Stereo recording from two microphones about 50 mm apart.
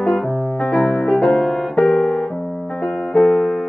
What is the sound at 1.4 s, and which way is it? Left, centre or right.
Piano, centre.